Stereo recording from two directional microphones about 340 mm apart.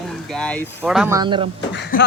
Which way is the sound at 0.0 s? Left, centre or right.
Centre.